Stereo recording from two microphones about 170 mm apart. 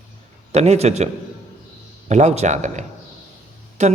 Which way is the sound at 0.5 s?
40° right (ahead or behind).